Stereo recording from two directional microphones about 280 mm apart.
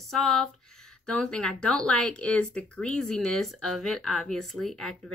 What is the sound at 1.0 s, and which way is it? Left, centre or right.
Speech, centre.